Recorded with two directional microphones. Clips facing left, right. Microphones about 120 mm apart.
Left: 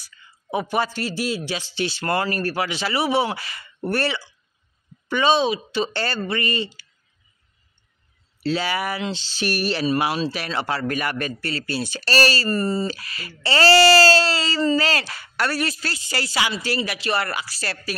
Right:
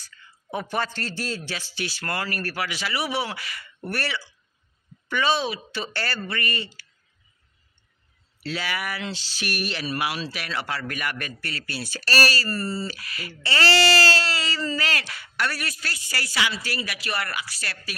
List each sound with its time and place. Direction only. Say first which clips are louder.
0.0 s speech: even; 15° left (ahead or behind)
8.4 s speech: left 7 dB; 30° left (ahead or behind)